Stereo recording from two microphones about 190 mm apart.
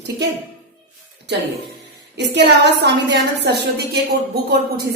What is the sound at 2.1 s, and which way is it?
A woman's voice, 65° right (ahead or behind).